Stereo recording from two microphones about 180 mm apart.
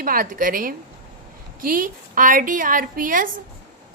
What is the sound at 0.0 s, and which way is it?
A woman's voice, 50° right (ahead or behind).